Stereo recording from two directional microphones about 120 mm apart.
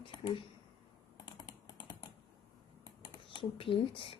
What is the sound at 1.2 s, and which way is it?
Computer keyboard, 35° left (ahead or behind).